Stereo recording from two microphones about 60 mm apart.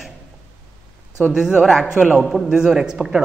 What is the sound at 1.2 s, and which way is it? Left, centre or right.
Speech, centre.